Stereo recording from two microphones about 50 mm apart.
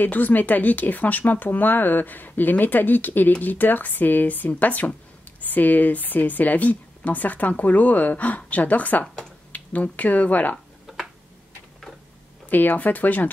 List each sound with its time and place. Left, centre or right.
0.0 s speech: left
9.0 s finger snapping: centre
9.5 s speech: left
10.9 s tick-tock: centre
12.4 s speech: left